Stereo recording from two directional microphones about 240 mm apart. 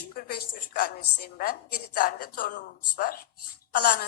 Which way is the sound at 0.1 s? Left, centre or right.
Left.